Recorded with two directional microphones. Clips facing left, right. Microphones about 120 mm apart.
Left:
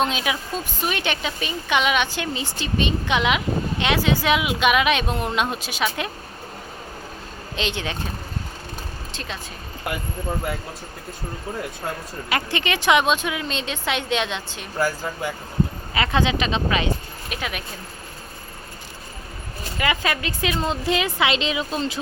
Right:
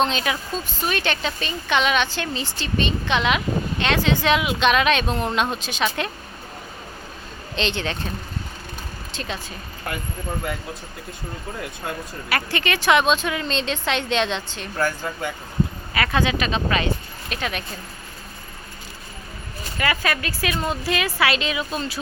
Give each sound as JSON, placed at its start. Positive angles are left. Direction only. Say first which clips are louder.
{"t": 0.0, "sound": "a woman's voice", "louder": "right 1 dB", "side_deg": 10}
{"t": 7.5, "sound": "a woman's voice", "louder": "right 2 dB", "side_deg": 10}
{"t": 9.1, "sound": "speech", "louder": "right 4 dB", "side_deg": 0}
{"t": 12.3, "sound": "a woman's voice", "louder": "even", "side_deg": 20}
{"t": 16.0, "sound": "a woman's voice", "louder": "even", "side_deg": 20}
{"t": 19.8, "sound": "a woman's voice", "louder": "even", "side_deg": 20}